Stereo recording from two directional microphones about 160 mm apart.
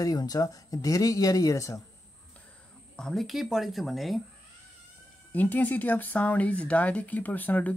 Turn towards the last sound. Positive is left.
turn(degrees=10)  # may be behind; listen again after turning